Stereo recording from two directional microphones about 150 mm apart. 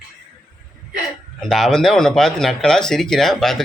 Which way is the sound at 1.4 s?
Centre (ahead or behind).